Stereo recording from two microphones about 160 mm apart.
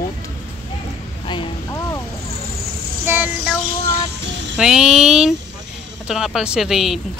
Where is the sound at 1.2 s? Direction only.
30° left (ahead or behind).